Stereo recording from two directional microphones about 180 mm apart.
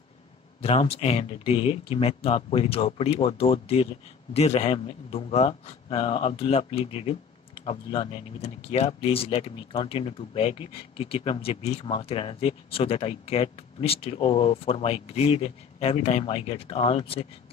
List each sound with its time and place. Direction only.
0.6 s speech: 30° left (ahead or behind)